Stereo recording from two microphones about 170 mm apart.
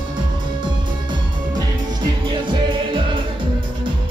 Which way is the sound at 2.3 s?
30° right (ahead or behind).